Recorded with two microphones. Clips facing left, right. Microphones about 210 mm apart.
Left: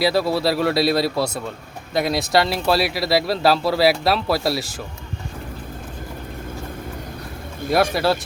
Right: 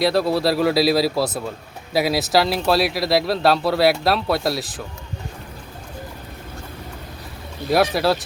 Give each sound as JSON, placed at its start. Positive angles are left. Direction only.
{"t": 0.0, "sound": "speech", "side_deg": 0}
{"t": 7.6, "sound": "vehicle", "side_deg": 50}
{"t": 7.9, "sound": "speech", "side_deg": 0}